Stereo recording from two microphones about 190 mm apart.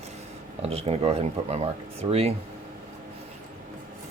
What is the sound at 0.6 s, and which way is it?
Speech, 30° right (ahead or behind).